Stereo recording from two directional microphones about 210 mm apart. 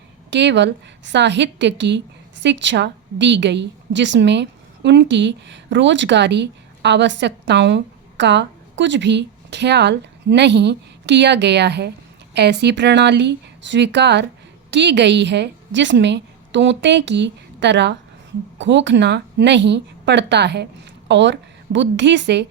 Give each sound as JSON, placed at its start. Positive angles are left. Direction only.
{"t": 0.3, "sound": "a woman's voice", "side_deg": -55}